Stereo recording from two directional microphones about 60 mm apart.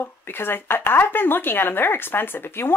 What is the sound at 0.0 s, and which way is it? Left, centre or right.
Speech, left.